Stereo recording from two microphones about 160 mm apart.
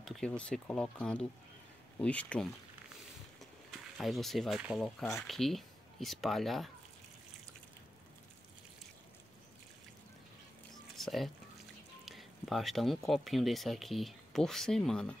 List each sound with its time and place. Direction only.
0.0 s speech: 5° left (ahead or behind)
4.0 s speech: centre (ahead or behind)
11.0 s a sound: centre (ahead or behind)
12.0 s speech: centre (ahead or behind)